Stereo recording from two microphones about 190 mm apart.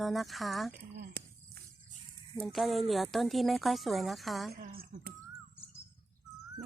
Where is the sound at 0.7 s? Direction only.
55° right (ahead or behind).